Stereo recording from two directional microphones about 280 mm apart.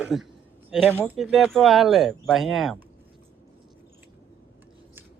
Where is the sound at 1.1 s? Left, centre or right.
Centre.